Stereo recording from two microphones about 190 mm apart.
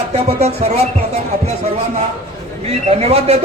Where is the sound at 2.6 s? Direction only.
35° right (ahead or behind).